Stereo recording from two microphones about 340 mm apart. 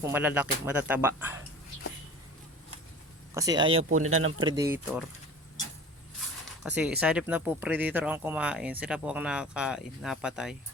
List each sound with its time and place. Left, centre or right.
0.0 s speech: centre
3.3 s speech: centre
3.8 s speech: right
4.4 s speech: centre
6.6 s speech: centre